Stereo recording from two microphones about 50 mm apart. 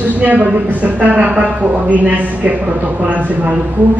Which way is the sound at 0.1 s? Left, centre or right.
Right.